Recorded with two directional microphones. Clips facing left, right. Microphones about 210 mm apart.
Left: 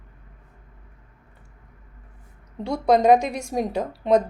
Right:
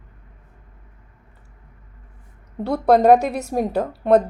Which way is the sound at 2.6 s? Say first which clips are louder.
Right 3 dB; 60° right (ahead or behind).